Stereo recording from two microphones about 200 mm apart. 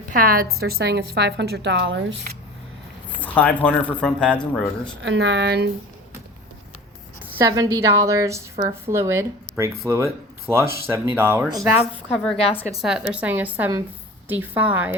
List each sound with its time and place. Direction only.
0.2 s a woman's voice: 45° right (ahead or behind); by 2.1 s 60° right (ahead or behind)
3.2 s speech: 5° left (ahead or behind)
5.0 s a woman's voice: 65° right (ahead or behind)
7.5 s speech: 15° right (ahead or behind)